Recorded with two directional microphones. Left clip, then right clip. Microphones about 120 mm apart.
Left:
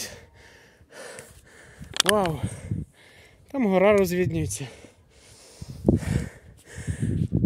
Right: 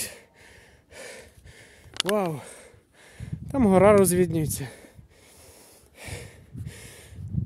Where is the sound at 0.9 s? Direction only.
25° right (ahead or behind).